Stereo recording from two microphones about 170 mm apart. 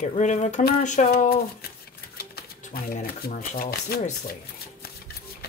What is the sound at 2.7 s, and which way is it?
Speech, 60° left (ahead or behind).